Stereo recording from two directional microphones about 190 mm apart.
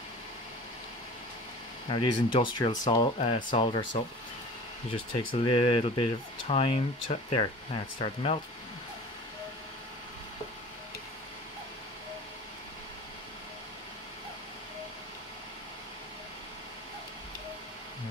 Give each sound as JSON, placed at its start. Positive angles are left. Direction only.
{"t": 1.9, "sound": "speech", "side_deg": 25}
{"t": 4.9, "sound": "speech", "side_deg": 25}